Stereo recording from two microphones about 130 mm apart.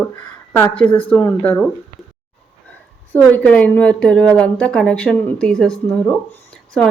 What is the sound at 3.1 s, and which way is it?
A woman's voice, 10° left (ahead or behind).